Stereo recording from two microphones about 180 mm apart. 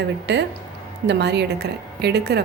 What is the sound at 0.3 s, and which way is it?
A woman's voice, 75° right (ahead or behind).